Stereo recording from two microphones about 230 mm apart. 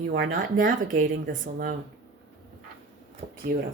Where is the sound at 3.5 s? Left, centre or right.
Right.